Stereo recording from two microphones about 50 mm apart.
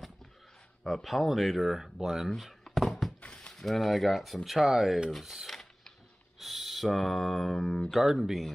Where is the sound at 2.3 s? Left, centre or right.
Centre.